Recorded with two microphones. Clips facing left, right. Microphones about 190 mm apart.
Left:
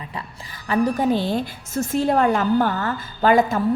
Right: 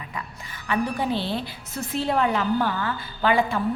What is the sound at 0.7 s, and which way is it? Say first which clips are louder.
A woman's voice: left 6 dB; 40° left (ahead or behind).